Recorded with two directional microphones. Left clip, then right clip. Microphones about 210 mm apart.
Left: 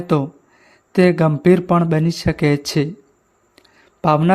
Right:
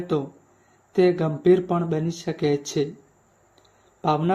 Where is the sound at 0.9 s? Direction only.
50° left (ahead or behind).